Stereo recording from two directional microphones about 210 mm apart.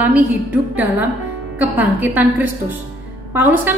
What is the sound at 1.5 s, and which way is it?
A woman's voice, 10° right (ahead or behind).